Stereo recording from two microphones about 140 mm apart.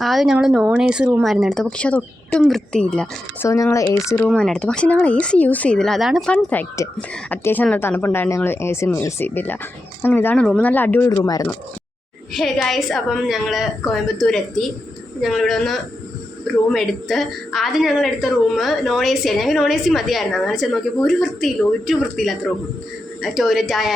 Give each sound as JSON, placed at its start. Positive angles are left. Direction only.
{"t": 0.0, "sound": "a woman's voice", "side_deg": 0}
{"t": 3.4, "sound": "speech", "side_deg": 20}
{"t": 4.3, "sound": "speech", "side_deg": 5}
{"t": 11.1, "sound": "speech", "side_deg": 25}
{"t": 12.3, "sound": "a woman's voice", "side_deg": 0}